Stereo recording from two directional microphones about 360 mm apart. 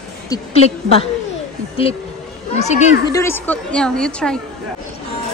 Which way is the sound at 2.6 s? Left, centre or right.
Centre.